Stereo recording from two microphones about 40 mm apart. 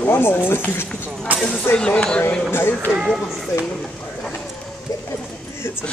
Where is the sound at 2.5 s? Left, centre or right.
Left.